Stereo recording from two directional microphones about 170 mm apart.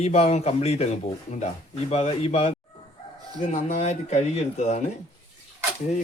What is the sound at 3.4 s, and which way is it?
Speech, 45° left (ahead or behind).